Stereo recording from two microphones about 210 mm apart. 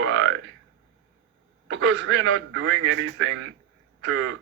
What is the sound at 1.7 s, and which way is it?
Speech, 60° right (ahead or behind).